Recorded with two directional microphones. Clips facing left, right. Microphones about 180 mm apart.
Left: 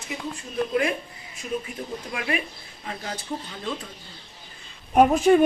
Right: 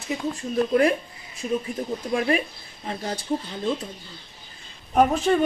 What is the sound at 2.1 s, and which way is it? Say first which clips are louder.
Speech: right 7 dB; 35° right (ahead or behind).